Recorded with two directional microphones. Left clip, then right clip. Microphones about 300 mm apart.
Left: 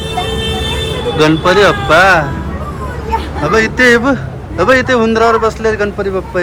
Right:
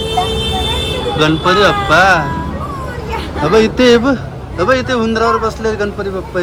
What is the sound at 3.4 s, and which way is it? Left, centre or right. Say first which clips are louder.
A man's voice: even; centre.